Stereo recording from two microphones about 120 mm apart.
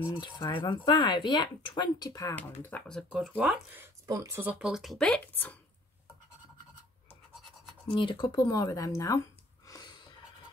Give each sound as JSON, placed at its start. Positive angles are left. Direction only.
{"t": 0.2, "sound": "speech", "side_deg": 45}
{"t": 2.6, "sound": "speech", "side_deg": 10}
{"t": 3.7, "sound": "a sound", "side_deg": -20}
{"t": 4.1, "sound": "speech", "side_deg": -25}
{"t": 4.4, "sound": "speech", "side_deg": -10}
{"t": 7.9, "sound": "speech", "side_deg": 45}
{"t": 8.3, "sound": "a sound", "side_deg": 30}